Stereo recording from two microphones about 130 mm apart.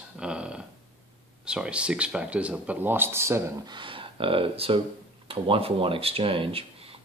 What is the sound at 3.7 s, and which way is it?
Speech, 40° right (ahead or behind).